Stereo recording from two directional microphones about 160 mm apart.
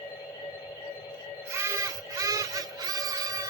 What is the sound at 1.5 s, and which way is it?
Music, 15° right (ahead or behind).